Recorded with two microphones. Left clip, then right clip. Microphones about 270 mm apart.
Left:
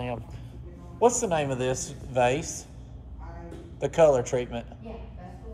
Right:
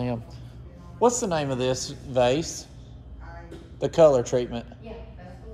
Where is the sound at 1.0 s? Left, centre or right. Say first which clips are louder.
Even; right.